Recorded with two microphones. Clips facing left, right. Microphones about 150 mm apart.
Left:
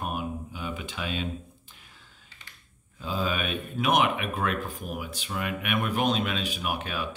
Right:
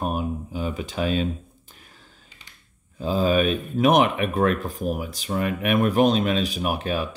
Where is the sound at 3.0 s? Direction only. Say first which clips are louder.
Right 9 dB; 40° right (ahead or behind).